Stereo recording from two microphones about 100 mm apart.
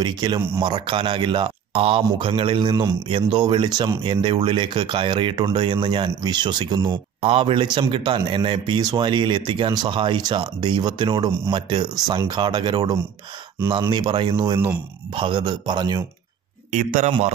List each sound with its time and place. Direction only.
0.0 s a man's voice: 50° right (ahead or behind)
7.2 s a man's voice: 70° right (ahead or behind); by 14.6 s 45° right (ahead or behind)
15.1 s a man's voice: 55° right (ahead or behind)